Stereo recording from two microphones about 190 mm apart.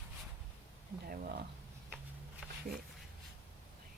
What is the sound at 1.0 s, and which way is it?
Speech, 50° right (ahead or behind).